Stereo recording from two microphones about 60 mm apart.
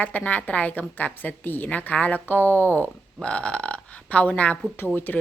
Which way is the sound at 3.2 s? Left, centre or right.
Centre.